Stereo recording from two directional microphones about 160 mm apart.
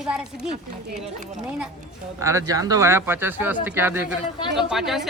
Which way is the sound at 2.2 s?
20° right (ahead or behind).